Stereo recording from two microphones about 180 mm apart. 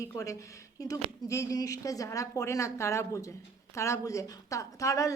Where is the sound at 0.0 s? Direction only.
15° left (ahead or behind).